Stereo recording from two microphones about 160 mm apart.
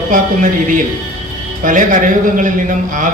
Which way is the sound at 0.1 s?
55° right (ahead or behind).